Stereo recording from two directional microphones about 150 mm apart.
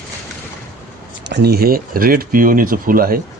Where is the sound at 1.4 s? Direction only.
90° right.